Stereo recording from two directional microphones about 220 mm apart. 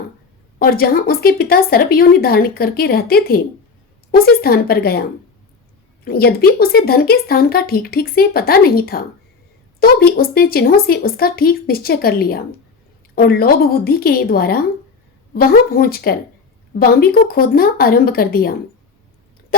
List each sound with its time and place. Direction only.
0.6 s speech: 45° left (ahead or behind)
6.1 s speech: 45° left (ahead or behind)